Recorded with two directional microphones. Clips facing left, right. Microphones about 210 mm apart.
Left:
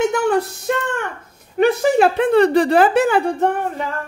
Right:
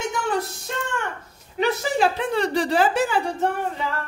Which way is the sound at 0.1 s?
60° left (ahead or behind).